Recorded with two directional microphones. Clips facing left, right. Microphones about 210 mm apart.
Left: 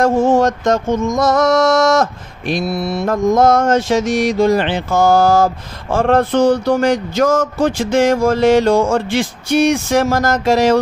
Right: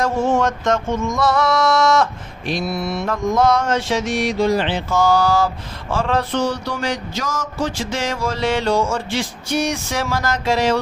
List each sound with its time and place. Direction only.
0.0 s mantra: 40° left (ahead or behind)
2.8 s mantra: 35° left (ahead or behind)